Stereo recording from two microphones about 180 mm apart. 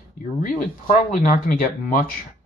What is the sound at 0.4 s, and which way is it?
Speech, 45° left (ahead or behind).